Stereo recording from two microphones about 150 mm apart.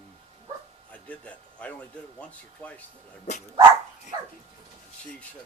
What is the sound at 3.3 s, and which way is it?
Speech, 50° left (ahead or behind).